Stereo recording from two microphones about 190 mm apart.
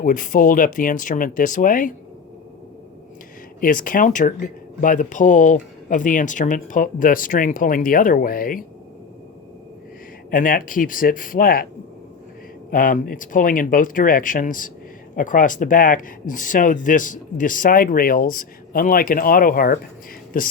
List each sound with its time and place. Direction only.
0.0 s speech: 45° left (ahead or behind)
3.6 s speech: 45° left (ahead or behind)
10.3 s speech: 45° left (ahead or behind)
12.7 s speech: 45° left (ahead or behind)